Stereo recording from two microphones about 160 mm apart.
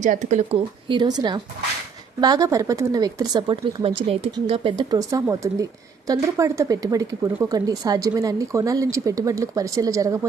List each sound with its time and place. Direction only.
0.0 s speech: 50° right (ahead or behind)
0.9 s speech: 30° right (ahead or behind)